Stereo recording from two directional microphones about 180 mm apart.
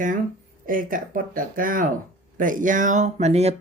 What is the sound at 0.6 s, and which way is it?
Speech, 50° right (ahead or behind).